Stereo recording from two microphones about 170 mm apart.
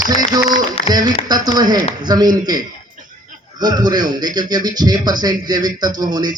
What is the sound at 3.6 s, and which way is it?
Speech, 25° right (ahead or behind).